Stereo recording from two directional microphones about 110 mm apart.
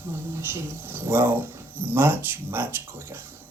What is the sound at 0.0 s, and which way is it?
Speech, 20° right (ahead or behind).